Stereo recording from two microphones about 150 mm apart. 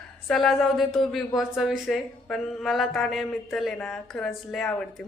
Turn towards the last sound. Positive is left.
turn(degrees=0)  # may be behind; listen again after turning